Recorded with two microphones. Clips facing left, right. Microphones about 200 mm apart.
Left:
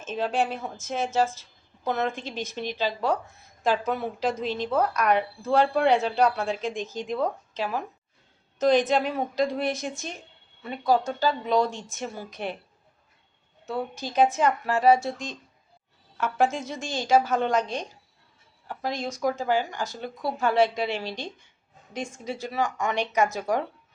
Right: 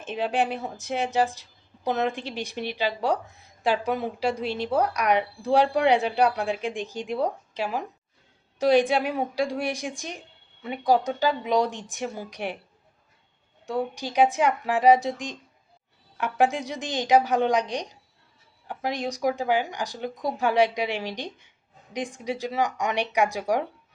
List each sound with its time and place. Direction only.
0.0 s a woman's voice: 15° right (ahead or behind)
13.7 s a woman's voice: 15° right (ahead or behind)